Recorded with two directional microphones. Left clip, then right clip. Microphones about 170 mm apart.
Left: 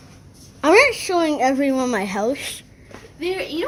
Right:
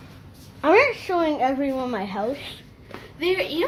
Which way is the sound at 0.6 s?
55° left (ahead or behind).